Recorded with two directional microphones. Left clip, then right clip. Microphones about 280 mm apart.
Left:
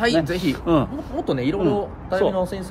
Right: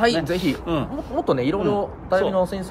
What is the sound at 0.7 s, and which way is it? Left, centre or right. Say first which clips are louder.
Speech: left 8 dB; centre.